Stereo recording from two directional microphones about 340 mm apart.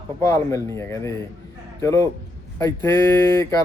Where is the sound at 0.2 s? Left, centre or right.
Centre.